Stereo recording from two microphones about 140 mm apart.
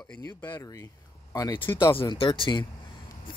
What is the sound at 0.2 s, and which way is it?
Speech, 15° left (ahead or behind).